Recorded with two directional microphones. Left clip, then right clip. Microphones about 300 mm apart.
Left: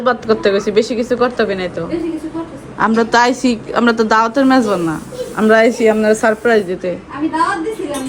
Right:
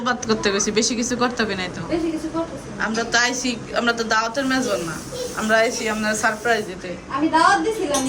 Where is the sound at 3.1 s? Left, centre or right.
Centre.